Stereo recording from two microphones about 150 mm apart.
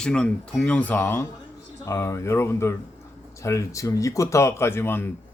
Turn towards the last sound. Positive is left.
turn(degrees=15)  # may be behind; listen again after turning